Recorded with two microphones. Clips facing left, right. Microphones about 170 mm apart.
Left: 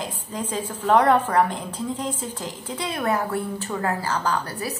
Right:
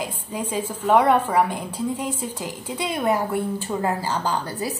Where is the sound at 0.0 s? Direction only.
10° right (ahead or behind).